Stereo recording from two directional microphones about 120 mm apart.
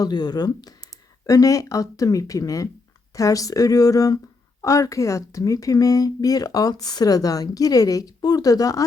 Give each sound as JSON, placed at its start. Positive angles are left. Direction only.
{"t": 0.0, "sound": "speech", "side_deg": 35}